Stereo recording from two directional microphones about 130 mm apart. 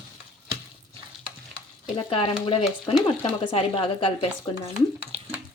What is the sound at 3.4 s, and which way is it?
Speech, 45° left (ahead or behind).